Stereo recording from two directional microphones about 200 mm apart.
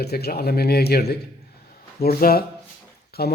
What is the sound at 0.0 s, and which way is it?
Speech, 50° left (ahead or behind).